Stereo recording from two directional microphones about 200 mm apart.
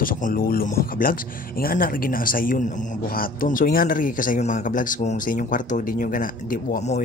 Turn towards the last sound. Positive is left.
turn(degrees=35)  # may be behind; listen again after turning